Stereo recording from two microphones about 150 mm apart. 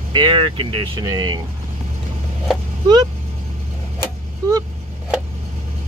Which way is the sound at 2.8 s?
30° right (ahead or behind).